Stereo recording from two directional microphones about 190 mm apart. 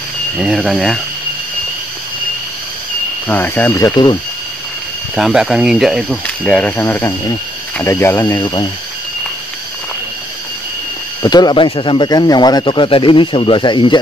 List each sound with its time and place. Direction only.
0.4 s speech: centre (ahead or behind)
3.3 s speech: 10° left (ahead or behind)
5.1 s speech: centre (ahead or behind); by 8.6 s 20° left (ahead or behind)
11.2 s speech: 20° left (ahead or behind)